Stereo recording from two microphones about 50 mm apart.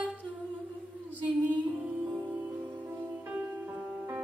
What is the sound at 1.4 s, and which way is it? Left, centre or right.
Female singing, right.